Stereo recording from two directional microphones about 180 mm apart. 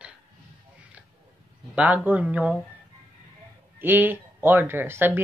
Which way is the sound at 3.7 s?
10° right (ahead or behind).